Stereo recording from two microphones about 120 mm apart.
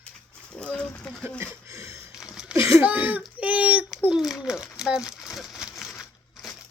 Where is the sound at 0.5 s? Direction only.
10° left (ahead or behind).